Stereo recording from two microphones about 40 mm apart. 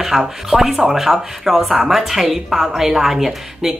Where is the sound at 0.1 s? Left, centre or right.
Centre.